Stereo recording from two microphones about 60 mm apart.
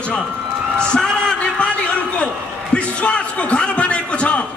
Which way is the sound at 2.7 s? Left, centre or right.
Centre.